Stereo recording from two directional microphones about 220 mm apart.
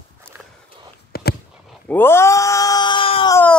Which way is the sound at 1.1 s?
45° left (ahead or behind).